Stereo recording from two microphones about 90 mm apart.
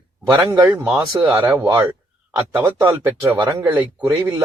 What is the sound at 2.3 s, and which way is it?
Speech, 20° right (ahead or behind).